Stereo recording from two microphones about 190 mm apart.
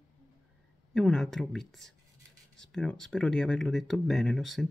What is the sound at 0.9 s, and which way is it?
Speech, centre (ahead or behind).